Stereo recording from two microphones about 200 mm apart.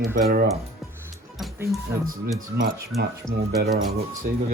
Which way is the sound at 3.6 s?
55° right (ahead or behind).